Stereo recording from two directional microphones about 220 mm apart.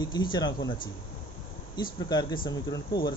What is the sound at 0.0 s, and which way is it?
Speech, 20° left (ahead or behind).